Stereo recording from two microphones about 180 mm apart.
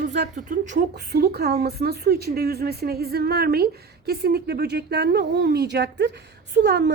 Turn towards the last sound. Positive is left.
turn(degrees=-70)  # may be behind; listen again after turning